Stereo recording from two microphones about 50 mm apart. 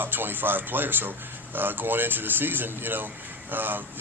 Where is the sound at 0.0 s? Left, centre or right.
Right.